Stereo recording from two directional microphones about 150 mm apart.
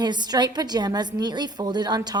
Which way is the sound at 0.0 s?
30° right (ahead or behind).